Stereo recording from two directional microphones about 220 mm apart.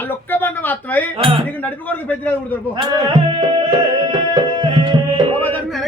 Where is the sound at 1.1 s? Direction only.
25° right (ahead or behind).